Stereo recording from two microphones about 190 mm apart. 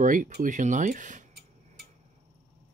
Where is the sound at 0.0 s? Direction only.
45° right (ahead or behind).